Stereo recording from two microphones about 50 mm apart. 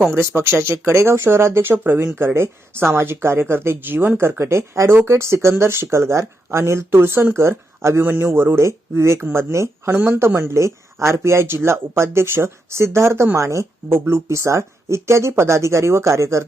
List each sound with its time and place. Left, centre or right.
0.1 s speech: right
4.2 s speech: right
7.3 s speech: right
8.2 s speech: right
13.3 s a woman's voice: right
14.0 s speech: right